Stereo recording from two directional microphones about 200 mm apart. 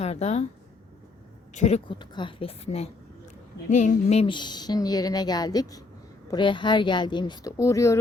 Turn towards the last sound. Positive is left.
turn(degrees=15)  # may be behind; listen again after turning